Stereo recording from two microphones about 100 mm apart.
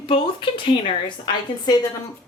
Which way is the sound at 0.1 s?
60° left (ahead or behind).